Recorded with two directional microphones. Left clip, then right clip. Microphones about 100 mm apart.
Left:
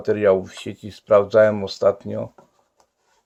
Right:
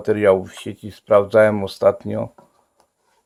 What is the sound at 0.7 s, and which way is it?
Speech, 15° right (ahead or behind).